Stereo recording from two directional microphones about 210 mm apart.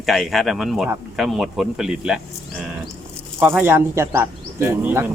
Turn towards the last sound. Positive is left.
turn(degrees=-10)  # may be behind; listen again after turning